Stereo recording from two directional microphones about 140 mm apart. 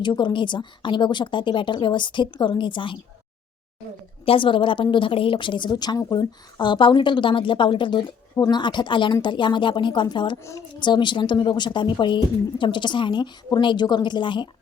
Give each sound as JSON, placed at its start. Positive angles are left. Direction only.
{"t": 0.0, "sound": "a woman's voice", "side_deg": 30}
{"t": 4.3, "sound": "a woman's voice", "side_deg": 40}